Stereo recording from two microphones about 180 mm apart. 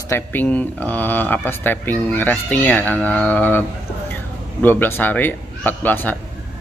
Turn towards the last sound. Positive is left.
turn(degrees=10)  # may be behind; listen again after turning